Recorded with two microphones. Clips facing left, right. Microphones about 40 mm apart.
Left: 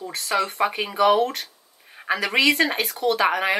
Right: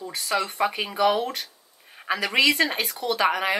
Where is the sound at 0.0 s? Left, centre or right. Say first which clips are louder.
Left 1 dB; centre.